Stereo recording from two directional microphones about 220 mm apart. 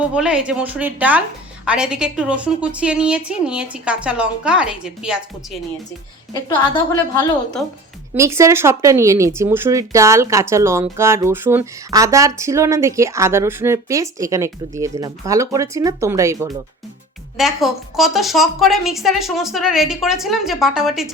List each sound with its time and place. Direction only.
0.0 s a woman's voice: 5° right (ahead or behind)
6.3 s a woman's voice: 20° left (ahead or behind)
7.6 s a woman's voice: centre (ahead or behind)
8.1 s speech: 15° right (ahead or behind)
17.3 s a woman's voice: centre (ahead or behind)